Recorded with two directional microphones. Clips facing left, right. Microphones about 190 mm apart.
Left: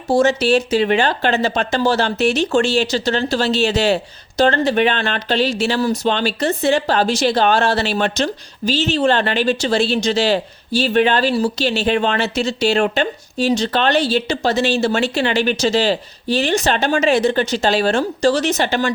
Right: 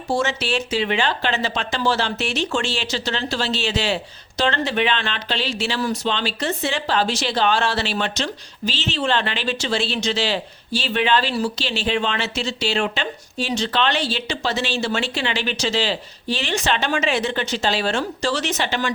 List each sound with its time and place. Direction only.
0.1 s speech: 40° left (ahead or behind)